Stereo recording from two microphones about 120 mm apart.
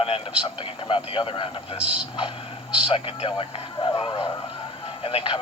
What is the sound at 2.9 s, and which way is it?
Speech, 50° left (ahead or behind).